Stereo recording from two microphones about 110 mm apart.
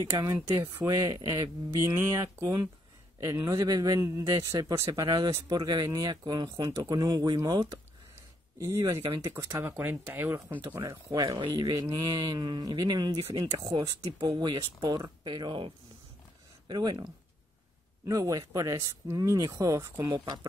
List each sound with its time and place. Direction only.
0.0 s speech: 30° right (ahead or behind)
1.9 s speech: 25° right (ahead or behind)
5.0 s speech: 40° right (ahead or behind); by 10.6 s 20° right (ahead or behind)
10.8 s speech: 35° right (ahead or behind)